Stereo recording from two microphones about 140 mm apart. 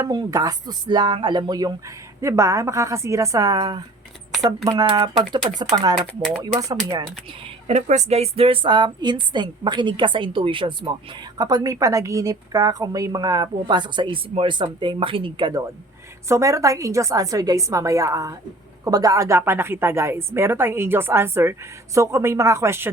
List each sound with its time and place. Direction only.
0.0 s a woman's voice: 25° right (ahead or behind)
7.7 s a woman's voice: 55° right (ahead or behind); by 15.6 s 35° right (ahead or behind)
16.3 s a woman's voice: 20° right (ahead or behind)